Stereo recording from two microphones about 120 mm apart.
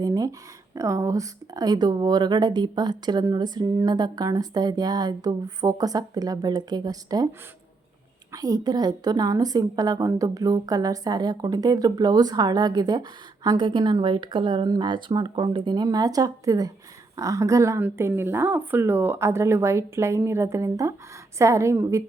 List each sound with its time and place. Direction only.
0.0 s a sound: 30° right (ahead or behind)
0.8 s a woman's voice: 25° right (ahead or behind)
8.3 s a woman's voice: 30° right (ahead or behind)